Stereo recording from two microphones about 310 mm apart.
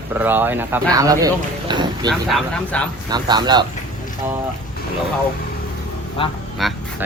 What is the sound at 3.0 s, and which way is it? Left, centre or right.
Speech, centre.